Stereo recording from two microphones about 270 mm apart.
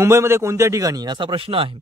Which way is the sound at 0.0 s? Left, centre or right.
Centre.